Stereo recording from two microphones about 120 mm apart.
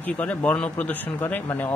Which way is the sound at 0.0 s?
10° left (ahead or behind).